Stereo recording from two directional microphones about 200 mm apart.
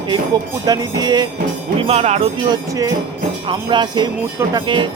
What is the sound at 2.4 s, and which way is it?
Speech, 20° right (ahead or behind).